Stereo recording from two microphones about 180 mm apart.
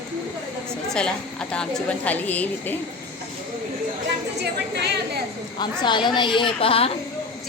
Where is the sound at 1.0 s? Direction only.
5° left (ahead or behind).